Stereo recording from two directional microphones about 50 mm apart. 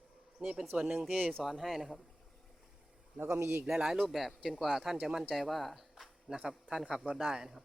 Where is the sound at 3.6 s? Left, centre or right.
Centre.